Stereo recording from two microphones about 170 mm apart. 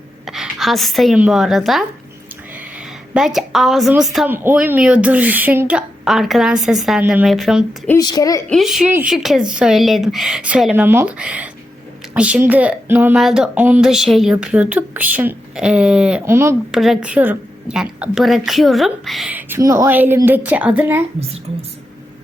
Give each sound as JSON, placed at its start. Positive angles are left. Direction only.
{"t": 0.3, "sound": "a woman's voice", "side_deg": 0}
{"t": 4.3, "sound": "a woman's voice", "side_deg": -10}
{"t": 8.0, "sound": "a woman's voice", "side_deg": 20}
{"t": 8.4, "sound": "a woman's voice", "side_deg": 0}
{"t": 16.7, "sound": "a woman's voice", "side_deg": 0}